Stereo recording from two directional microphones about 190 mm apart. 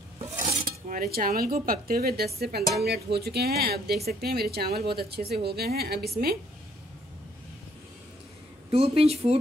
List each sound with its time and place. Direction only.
0.5 s speech: 45° right (ahead or behind)
8.7 s speech: 30° right (ahead or behind)